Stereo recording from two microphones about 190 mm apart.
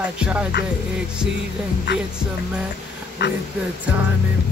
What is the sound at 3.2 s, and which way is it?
Speech, 60° left (ahead or behind).